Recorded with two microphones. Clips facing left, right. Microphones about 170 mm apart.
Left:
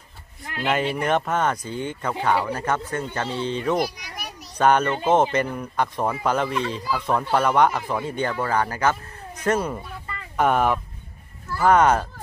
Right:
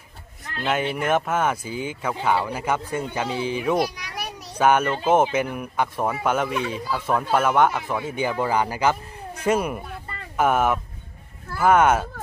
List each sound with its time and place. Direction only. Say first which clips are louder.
0.7 s speech: even; centre (ahead or behind)